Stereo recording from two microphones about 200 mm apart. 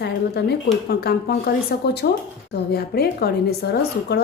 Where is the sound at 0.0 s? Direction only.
55° left (ahead or behind).